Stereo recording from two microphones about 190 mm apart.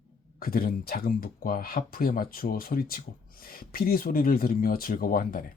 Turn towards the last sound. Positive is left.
turn(degrees=50)  # may be behind; listen again after turning